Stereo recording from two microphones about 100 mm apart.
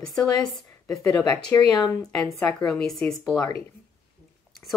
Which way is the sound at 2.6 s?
5° left (ahead or behind).